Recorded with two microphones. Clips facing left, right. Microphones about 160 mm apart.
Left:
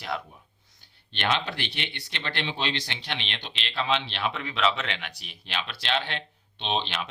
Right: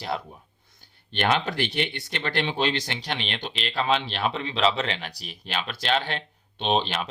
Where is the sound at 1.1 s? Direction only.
45° right (ahead or behind).